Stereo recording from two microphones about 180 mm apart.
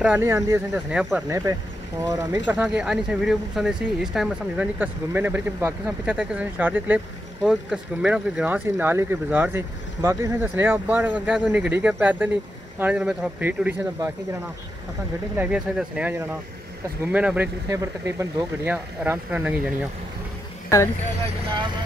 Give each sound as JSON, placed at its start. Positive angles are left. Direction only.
{"t": 0.0, "sound": "speech", "side_deg": -15}
{"t": 0.8, "sound": "speech", "side_deg": -5}
{"t": 1.5, "sound": "speech", "side_deg": -20}
{"t": 15.3, "sound": "speech", "side_deg": -5}